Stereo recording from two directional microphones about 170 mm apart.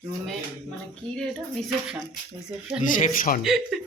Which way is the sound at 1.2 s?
5° left (ahead or behind).